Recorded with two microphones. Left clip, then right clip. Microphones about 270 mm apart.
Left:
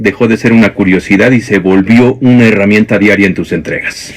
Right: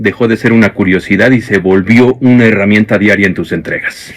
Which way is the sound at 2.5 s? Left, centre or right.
Right.